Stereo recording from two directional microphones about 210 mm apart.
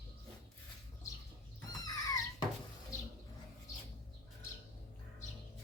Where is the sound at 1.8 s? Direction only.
15° left (ahead or behind).